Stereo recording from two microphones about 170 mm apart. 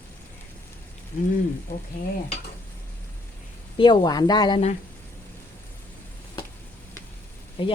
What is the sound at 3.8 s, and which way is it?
Speech, 25° left (ahead or behind).